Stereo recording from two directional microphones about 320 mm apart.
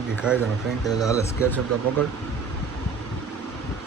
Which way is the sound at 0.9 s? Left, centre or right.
Centre.